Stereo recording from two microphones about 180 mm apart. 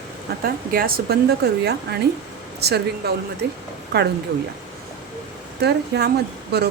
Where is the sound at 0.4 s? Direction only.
55° right (ahead or behind).